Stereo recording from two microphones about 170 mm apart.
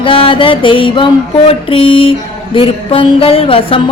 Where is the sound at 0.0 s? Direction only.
30° left (ahead or behind).